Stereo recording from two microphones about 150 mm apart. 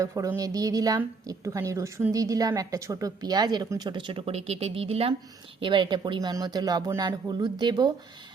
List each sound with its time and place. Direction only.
0.0 s a woman's voice: 20° right (ahead or behind)